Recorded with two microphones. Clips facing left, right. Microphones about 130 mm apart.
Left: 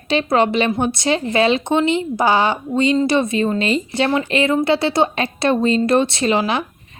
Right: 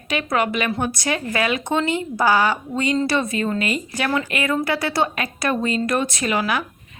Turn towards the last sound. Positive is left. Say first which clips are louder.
# left 4 dB
turn(degrees=25)  # may be behind; listen again after turning